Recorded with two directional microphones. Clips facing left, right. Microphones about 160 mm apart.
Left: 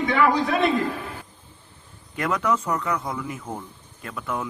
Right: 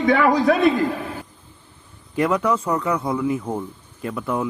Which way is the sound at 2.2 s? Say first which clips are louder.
Right 4 dB; 30° right (ahead or behind).